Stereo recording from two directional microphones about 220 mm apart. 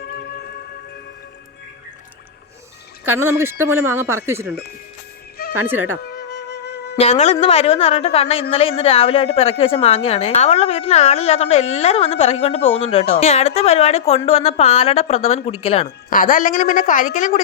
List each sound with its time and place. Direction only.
3.0 s speech: 10° right (ahead or behind)
5.5 s speech: 10° right (ahead or behind)
6.0 s music: 45° left (ahead or behind)
6.9 s a woman's voice: 30° left (ahead or behind)
16.0 s a woman's voice: 40° left (ahead or behind)